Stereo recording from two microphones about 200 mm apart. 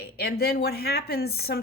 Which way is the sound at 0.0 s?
50° left (ahead or behind).